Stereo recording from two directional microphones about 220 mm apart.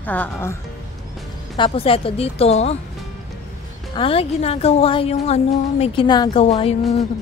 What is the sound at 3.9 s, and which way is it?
A woman's voice, 25° left (ahead or behind).